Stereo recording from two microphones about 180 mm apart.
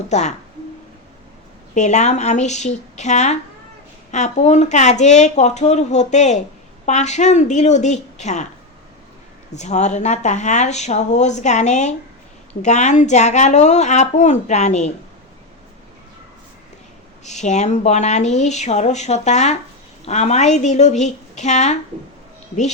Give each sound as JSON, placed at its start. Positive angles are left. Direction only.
{"t": 0.1, "sound": "speech", "side_deg": 40}
{"t": 1.7, "sound": "speech", "side_deg": 40}
{"t": 9.6, "sound": "speech", "side_deg": 40}
{"t": 17.2, "sound": "speech", "side_deg": 40}